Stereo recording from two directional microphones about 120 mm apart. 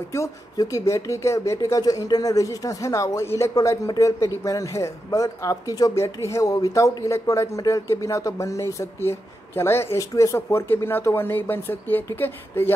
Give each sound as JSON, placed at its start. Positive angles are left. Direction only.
{"t": 0.1, "sound": "speech", "side_deg": 25}